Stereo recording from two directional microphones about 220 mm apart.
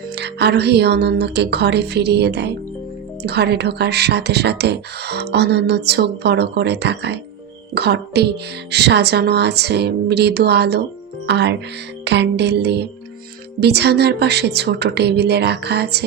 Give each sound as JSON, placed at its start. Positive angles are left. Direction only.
{"t": 0.2, "sound": "speech", "side_deg": -50}